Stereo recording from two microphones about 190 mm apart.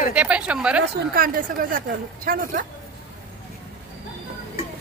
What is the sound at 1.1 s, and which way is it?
Speech, 50° right (ahead or behind).